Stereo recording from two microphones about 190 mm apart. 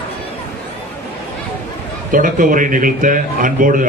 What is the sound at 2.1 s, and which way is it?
A man's voice, 45° right (ahead or behind).